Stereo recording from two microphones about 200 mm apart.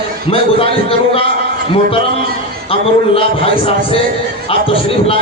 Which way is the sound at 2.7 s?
30° left (ahead or behind).